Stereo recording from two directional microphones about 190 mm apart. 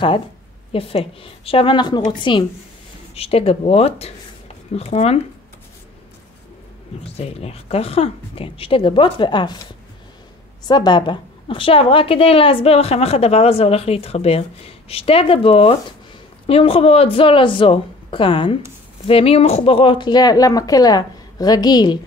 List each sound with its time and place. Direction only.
0.7 s a woman's voice: 30° left (ahead or behind)
7.2 s speech: 30° left (ahead or behind)
10.7 s a woman's voice: 25° left (ahead or behind)